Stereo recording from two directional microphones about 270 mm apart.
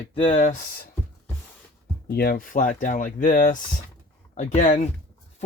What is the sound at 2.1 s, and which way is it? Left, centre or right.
Speech, left.